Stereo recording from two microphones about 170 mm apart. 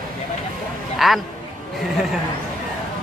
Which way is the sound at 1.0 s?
Centre (ahead or behind).